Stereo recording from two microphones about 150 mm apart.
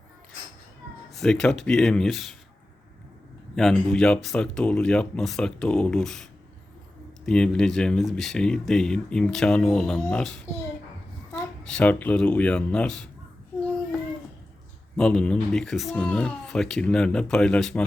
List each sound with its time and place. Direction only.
1.1 s speech: 5° left (ahead or behind)
3.5 s speech: centre (ahead or behind)
7.3 s speech: 5° left (ahead or behind)
11.6 s speech: 5° left (ahead or behind)
14.9 s speech: 5° left (ahead or behind)